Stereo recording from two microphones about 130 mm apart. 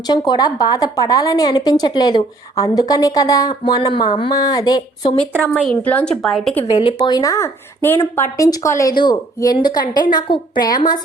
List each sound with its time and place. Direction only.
0.1 s a woman's voice: 30° left (ahead or behind)
5.8 s speech: 10° left (ahead or behind)
6.2 s a woman's voice: centre (ahead or behind)
6.7 s a woman's voice: 40° left (ahead or behind)